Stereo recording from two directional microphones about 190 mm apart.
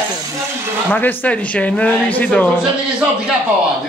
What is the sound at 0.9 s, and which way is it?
Speech, 10° left (ahead or behind).